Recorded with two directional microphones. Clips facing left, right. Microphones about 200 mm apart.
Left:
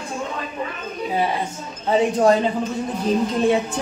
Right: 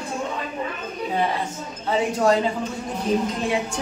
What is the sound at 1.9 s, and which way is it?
Speech, 30° left (ahead or behind).